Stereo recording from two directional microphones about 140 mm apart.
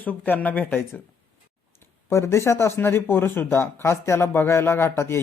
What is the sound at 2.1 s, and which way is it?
A man's voice, 20° left (ahead or behind).